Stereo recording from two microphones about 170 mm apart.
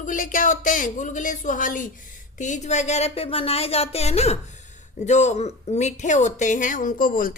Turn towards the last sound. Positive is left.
turn(degrees=55)  # may be behind; listen again after turning